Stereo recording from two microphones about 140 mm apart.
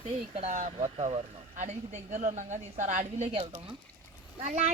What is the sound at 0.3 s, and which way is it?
Speech, 60° right (ahead or behind).